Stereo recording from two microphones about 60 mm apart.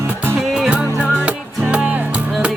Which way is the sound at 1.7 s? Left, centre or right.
Right.